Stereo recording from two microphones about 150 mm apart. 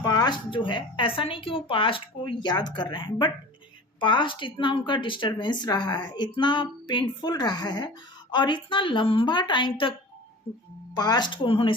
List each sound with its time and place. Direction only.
0.0 s a woman's voice: 25° left (ahead or behind)
10.9 s a woman's voice: 25° left (ahead or behind)